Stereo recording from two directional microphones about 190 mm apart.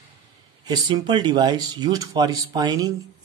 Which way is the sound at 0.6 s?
25° right (ahead or behind).